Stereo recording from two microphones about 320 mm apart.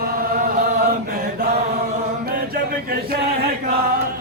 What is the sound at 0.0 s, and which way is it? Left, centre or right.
Chant, right.